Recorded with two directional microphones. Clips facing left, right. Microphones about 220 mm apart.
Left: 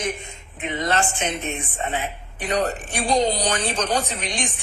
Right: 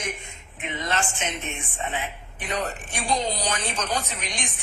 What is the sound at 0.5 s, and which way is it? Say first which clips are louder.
A woman's voice: left 5 dB; 35° left (ahead or behind).